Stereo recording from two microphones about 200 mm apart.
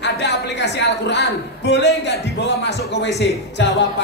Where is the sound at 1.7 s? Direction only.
60° left (ahead or behind).